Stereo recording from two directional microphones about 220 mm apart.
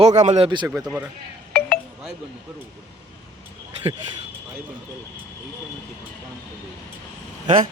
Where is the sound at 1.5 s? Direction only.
5° left (ahead or behind).